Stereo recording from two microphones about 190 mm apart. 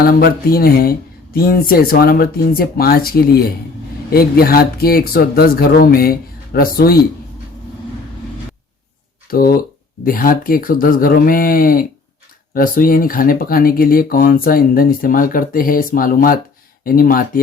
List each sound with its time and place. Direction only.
0.0 s speech: 50° left (ahead or behind)
9.3 s speech: 50° left (ahead or behind)